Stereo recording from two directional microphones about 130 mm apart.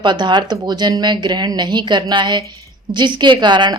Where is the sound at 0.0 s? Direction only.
35° right (ahead or behind).